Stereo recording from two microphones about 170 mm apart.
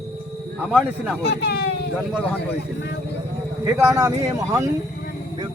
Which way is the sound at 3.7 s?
15° right (ahead or behind).